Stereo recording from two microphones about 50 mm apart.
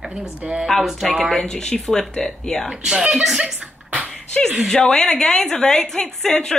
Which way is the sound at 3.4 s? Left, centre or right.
Right.